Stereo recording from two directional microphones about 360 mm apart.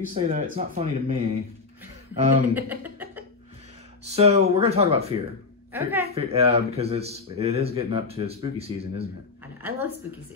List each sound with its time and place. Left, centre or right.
0.1 s speech: centre
2.5 s speech: centre
4.0 s speech: centre
5.7 s a woman's voice: centre
6.0 s speech: right
9.6 s a woman's voice: centre